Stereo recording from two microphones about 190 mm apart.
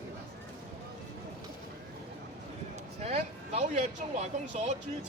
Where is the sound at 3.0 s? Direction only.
35° right (ahead or behind).